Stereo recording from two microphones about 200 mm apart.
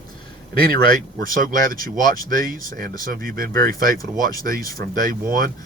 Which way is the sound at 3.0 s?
45° right (ahead or behind).